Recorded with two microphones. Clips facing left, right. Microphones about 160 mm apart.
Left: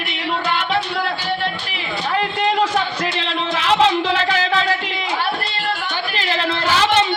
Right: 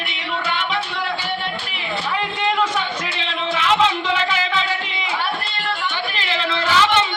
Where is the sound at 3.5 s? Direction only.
35° left (ahead or behind).